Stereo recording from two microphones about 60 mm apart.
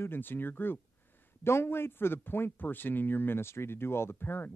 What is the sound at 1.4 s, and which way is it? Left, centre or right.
Speech, left.